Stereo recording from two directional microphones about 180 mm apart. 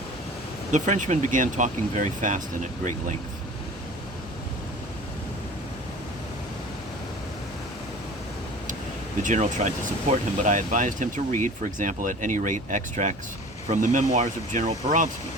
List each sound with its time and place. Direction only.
0.7 s speech: 45° right (ahead or behind)
9.2 s speech: 45° right (ahead or behind)